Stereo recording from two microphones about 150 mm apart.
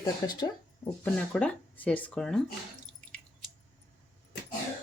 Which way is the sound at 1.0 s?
10° left (ahead or behind).